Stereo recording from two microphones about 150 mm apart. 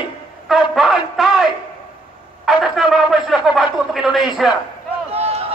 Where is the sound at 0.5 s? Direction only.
Centre (ahead or behind).